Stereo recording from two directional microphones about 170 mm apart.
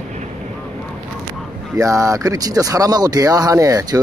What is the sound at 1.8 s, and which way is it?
Speech, 20° right (ahead or behind).